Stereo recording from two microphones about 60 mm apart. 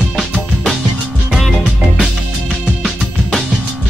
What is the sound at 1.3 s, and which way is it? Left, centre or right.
Music, centre.